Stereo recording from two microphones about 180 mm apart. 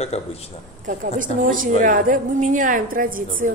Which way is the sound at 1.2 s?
45° right (ahead or behind).